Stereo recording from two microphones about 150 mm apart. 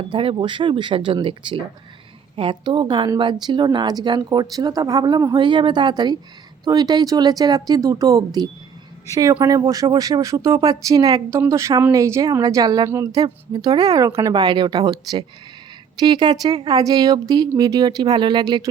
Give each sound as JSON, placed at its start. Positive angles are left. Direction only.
{"t": 0.1, "sound": "speech", "side_deg": -35}